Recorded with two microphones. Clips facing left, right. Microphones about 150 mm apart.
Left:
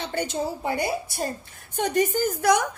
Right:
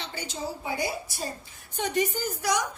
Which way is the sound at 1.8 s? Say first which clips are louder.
Left 5 dB; 50° left (ahead or behind).